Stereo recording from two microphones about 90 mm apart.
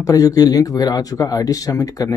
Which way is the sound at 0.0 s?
40° left (ahead or behind).